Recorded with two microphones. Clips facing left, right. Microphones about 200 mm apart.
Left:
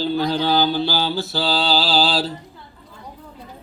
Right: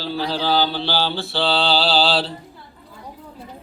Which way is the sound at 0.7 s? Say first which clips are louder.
Left 2 dB; 45° left (ahead or behind).